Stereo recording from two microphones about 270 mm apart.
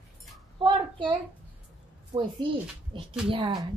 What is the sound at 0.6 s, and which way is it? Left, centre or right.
A child's voice, centre.